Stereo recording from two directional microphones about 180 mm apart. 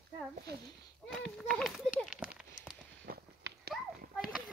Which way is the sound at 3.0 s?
60° right (ahead or behind).